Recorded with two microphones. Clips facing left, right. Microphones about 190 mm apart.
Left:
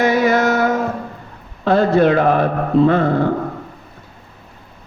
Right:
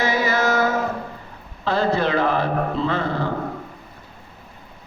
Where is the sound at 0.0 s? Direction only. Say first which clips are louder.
Left 6 dB; 55° left (ahead or behind).